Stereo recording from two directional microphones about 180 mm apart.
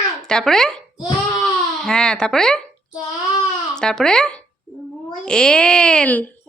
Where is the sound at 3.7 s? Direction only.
5° left (ahead or behind).